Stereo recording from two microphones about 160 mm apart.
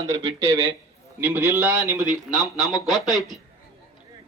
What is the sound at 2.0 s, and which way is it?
Speech, centre (ahead or behind).